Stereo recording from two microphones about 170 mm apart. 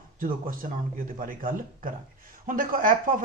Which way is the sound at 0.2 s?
55° right (ahead or behind).